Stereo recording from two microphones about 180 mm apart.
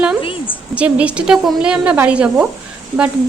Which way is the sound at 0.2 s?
30° left (ahead or behind).